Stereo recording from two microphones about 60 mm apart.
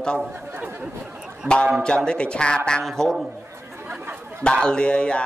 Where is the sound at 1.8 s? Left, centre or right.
Centre.